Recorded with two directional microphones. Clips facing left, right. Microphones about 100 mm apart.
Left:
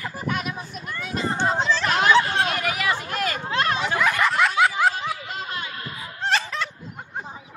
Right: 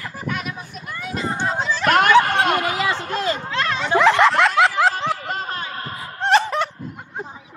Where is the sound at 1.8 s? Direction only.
60° right (ahead or behind).